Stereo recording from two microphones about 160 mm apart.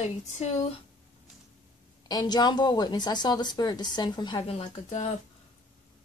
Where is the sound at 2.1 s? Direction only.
25° left (ahead or behind); by 5.1 s 40° left (ahead or behind).